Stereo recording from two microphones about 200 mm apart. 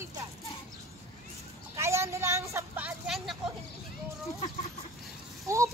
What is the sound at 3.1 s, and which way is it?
Vehicle, centre (ahead or behind).